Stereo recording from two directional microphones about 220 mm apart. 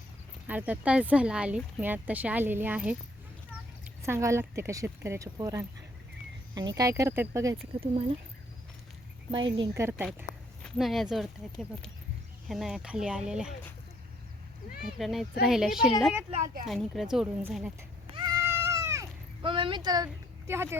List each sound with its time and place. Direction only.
0.4 s speech: 5° right (ahead or behind)
4.0 s speech: 10° right (ahead or behind)
7.8 s speech: 25° right (ahead or behind)
9.3 s speech: 20° right (ahead or behind)
10.6 s speech: centre (ahead or behind)
12.5 s speech: centre (ahead or behind)
14.9 s speech: centre (ahead or behind)
16.3 s speech: 35° right (ahead or behind)
16.6 s speech: centre (ahead or behind)
18.1 s cat: 20° right (ahead or behind)
19.4 s speech: 25° right (ahead or behind)